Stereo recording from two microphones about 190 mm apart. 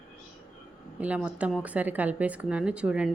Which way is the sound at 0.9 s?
5° right (ahead or behind).